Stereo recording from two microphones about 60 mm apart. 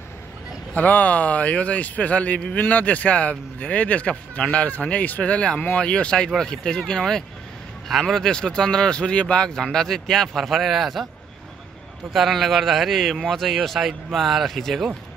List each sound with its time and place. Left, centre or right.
0.7 s a man's voice: left; by 11.1 s centre
12.1 s a man's voice: centre